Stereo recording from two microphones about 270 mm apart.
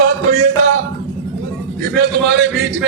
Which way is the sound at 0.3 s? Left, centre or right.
Right.